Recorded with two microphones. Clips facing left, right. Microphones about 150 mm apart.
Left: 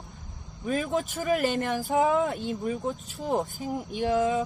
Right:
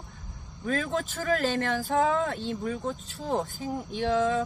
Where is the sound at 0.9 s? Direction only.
20° left (ahead or behind).